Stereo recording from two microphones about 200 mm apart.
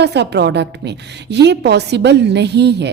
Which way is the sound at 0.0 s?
55° right (ahead or behind).